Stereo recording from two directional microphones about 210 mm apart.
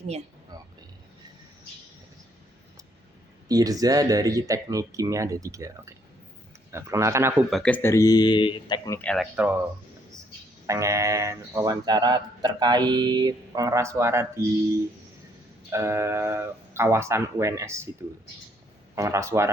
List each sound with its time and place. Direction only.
0.5 s vehicle: 20° right (ahead or behind)
3.5 s speech: 15° right (ahead or behind)
7.5 s speech: 5° left (ahead or behind)
9.0 s speech: 5° left (ahead or behind)
9.3 s speech: 5° right (ahead or behind)
10.7 s speech: 15° right (ahead or behind)
15.7 s speech: 15° right (ahead or behind)
18.9 s speech: 15° right (ahead or behind)